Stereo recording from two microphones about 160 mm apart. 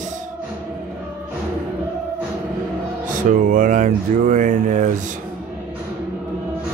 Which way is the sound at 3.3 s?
55° right (ahead or behind).